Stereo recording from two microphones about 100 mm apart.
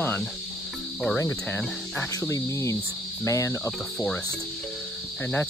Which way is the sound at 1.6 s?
Centre (ahead or behind).